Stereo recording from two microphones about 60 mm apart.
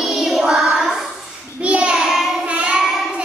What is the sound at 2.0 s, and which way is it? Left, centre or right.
Child singing, centre.